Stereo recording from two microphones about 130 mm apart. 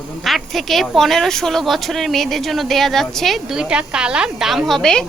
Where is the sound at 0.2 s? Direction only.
Centre (ahead or behind).